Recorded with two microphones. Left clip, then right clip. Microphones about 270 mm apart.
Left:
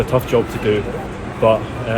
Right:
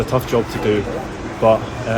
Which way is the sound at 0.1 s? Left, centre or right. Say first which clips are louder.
Left 2 dB; centre.